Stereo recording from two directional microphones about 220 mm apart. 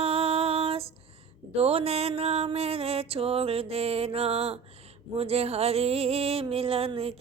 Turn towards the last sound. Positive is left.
turn(degrees=-25)  # may be behind; listen again after turning